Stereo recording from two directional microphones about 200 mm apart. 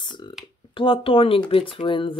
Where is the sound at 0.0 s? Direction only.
20° left (ahead or behind).